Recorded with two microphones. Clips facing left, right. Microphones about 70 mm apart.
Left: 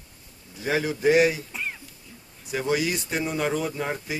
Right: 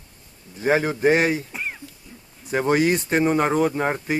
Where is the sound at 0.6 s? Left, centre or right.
Right.